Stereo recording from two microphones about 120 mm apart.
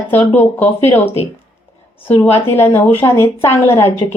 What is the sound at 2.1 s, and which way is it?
A woman's voice, 20° left (ahead or behind).